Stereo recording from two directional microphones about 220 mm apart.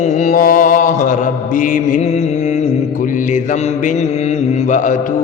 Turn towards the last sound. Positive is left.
turn(degrees=35)  # may be behind; listen again after turning